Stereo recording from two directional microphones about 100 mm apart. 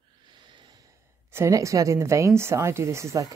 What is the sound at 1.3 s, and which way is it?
A woman's voice, 30° right (ahead or behind).